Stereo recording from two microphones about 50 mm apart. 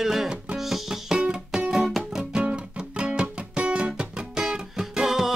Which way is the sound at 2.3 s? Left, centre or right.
Centre.